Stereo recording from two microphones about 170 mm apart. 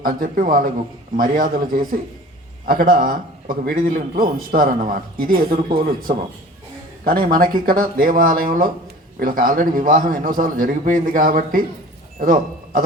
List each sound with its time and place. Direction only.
0.0 s a man's voice: 55° right (ahead or behind)